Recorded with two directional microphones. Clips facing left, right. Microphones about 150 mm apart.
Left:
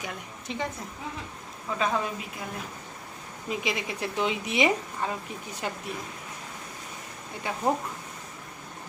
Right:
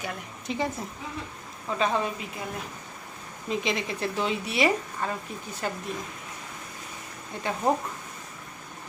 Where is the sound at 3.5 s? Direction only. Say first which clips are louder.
Right 2 dB; 10° left (ahead or behind).